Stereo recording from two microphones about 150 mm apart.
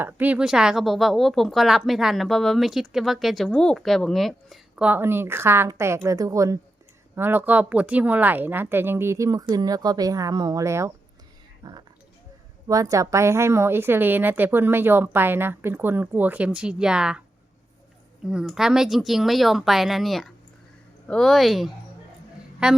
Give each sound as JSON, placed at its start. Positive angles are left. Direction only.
{"t": 0.0, "sound": "a woman's voice", "side_deg": -10}
{"t": 11.6, "sound": "a woman's voice", "side_deg": -30}
{"t": 18.3, "sound": "a woman's voice", "side_deg": -5}